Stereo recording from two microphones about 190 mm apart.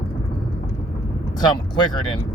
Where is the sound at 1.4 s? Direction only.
25° left (ahead or behind).